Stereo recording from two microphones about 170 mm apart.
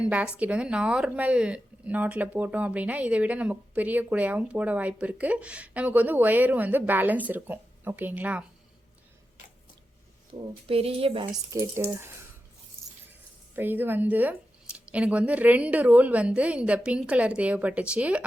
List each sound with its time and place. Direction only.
0.0 s speech: 10° right (ahead or behind)
10.3 s speech: 35° right (ahead or behind)
11.5 s speech: 15° right (ahead or behind)
13.6 s speech: 10° right (ahead or behind)